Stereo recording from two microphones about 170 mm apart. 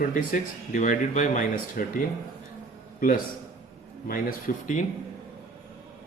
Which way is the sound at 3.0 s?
55° left (ahead or behind).